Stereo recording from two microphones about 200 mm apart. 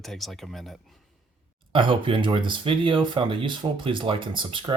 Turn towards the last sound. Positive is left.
turn(degrees=-25)  # may be behind; listen again after turning